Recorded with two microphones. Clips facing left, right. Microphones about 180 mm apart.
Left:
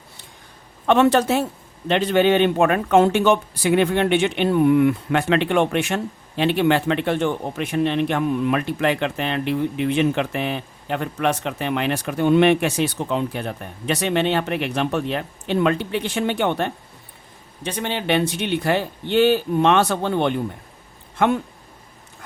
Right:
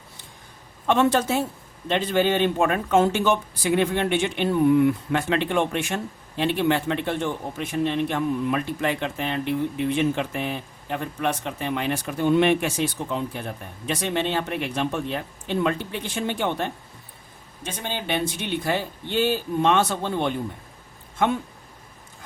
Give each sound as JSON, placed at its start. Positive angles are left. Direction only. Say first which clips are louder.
{"t": 0.9, "sound": "speech", "louder": "left 4 dB", "side_deg": 65}